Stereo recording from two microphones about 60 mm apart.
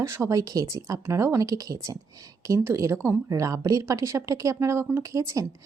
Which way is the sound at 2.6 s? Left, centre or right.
Right.